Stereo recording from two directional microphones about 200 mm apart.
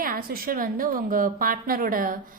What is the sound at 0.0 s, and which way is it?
A woman's voice, 45° right (ahead or behind).